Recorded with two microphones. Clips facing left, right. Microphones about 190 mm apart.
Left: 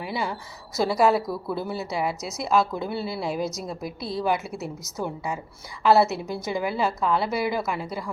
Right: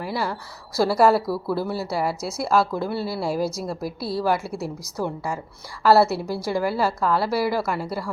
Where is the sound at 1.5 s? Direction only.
Centre (ahead or behind).